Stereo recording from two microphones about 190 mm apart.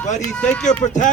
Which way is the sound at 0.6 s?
40° left (ahead or behind).